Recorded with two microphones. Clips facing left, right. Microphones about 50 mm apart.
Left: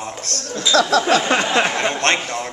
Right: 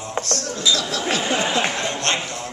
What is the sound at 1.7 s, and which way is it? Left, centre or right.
Speech, left.